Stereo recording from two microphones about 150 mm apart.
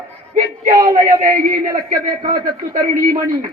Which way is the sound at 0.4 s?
70° right (ahead or behind).